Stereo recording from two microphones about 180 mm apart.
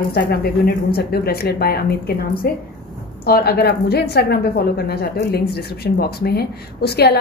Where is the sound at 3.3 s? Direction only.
60° left (ahead or behind).